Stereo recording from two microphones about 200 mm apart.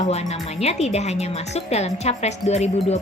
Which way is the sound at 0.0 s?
30° left (ahead or behind).